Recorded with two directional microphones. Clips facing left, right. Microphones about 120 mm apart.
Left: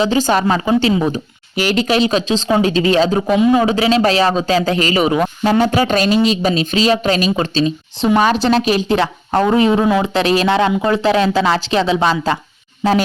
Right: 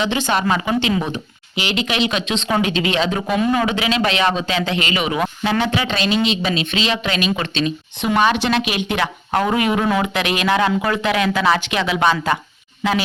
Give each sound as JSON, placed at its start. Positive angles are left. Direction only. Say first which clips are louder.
{"t": 0.0, "sound": "a man's voice", "louder": "left 5 dB", "side_deg": 40}
{"t": 0.4, "sound": "a man's voice", "louder": "left 4 dB", "side_deg": 30}